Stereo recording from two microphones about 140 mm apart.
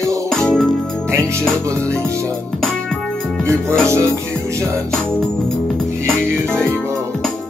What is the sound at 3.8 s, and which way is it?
Music, 20° right (ahead or behind).